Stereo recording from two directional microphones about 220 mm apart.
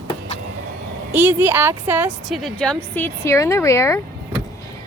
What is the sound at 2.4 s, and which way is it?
A woman's voice, 5° left (ahead or behind).